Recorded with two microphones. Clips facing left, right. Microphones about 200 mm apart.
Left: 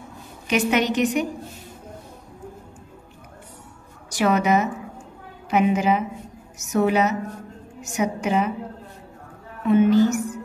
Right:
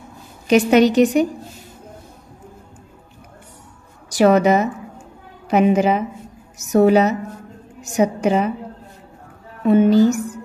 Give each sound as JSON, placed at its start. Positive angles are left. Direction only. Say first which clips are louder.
{"t": 0.5, "sound": "a woman's voice", "louder": "right 8 dB", "side_deg": -35}
{"t": 4.1, "sound": "a woman's voice", "louder": "right 6 dB", "side_deg": -35}
{"t": 9.7, "sound": "a woman's voice", "louder": "right 4 dB", "side_deg": -35}